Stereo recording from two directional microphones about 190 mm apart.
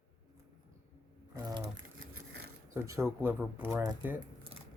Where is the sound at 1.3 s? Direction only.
20° right (ahead or behind).